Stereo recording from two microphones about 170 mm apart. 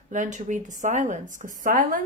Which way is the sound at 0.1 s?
45° right (ahead or behind).